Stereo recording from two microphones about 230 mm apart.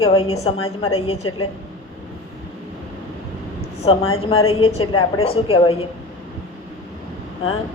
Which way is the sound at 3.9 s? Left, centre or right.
Left.